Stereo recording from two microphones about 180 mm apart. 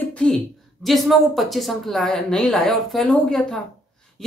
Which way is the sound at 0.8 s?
Centre (ahead or behind).